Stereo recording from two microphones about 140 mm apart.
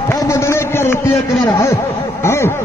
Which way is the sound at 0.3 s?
20° left (ahead or behind).